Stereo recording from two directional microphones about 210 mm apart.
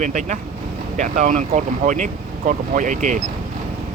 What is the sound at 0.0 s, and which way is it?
Speech, 35° right (ahead or behind).